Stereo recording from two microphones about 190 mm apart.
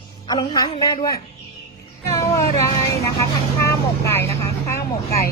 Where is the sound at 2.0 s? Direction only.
15° left (ahead or behind).